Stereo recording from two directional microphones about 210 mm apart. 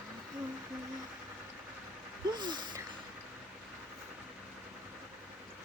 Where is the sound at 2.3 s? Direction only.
20° right (ahead or behind).